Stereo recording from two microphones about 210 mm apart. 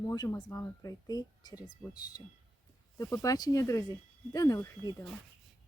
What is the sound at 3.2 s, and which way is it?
Speech, 15° left (ahead or behind).